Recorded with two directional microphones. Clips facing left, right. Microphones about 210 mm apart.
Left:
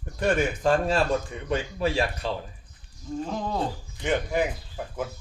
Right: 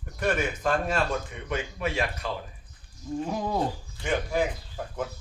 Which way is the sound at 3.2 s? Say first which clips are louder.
Right 1 dB; 10° right (ahead or behind).